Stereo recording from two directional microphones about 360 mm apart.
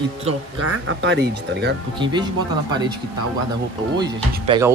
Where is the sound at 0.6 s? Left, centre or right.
Right.